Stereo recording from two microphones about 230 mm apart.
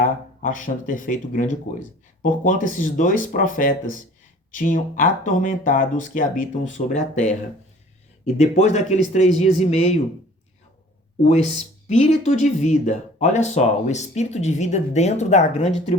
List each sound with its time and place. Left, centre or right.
0.0 s speech: left
11.2 s speech: left